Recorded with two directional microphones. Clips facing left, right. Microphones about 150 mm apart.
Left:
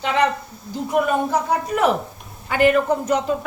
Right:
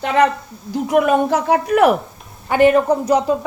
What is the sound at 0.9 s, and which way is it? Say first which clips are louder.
Speech: right 5 dB; 75° right (ahead or behind).